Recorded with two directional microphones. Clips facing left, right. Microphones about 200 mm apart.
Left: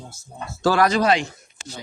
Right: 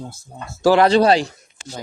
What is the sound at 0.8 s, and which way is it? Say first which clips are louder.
Speech: right 3 dB; 30° right (ahead or behind).